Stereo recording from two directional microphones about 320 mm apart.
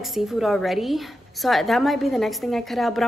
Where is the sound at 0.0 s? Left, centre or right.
Centre.